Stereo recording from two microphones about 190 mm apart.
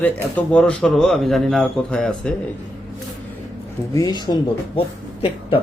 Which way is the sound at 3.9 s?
20° left (ahead or behind).